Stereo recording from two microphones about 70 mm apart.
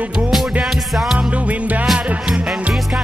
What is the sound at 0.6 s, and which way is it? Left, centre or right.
Music, centre.